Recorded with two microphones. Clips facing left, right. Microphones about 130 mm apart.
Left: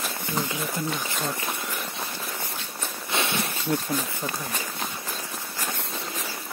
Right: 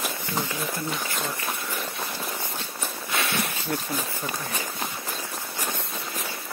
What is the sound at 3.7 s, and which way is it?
Speech, 20° left (ahead or behind).